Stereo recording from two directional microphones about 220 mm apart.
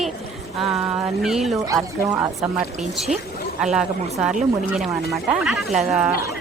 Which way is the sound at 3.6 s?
5° right (ahead or behind).